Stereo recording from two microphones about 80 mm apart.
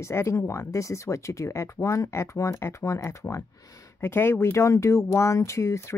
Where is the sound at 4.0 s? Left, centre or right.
Left.